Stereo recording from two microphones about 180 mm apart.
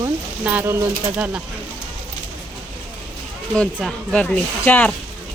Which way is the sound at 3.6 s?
5° left (ahead or behind).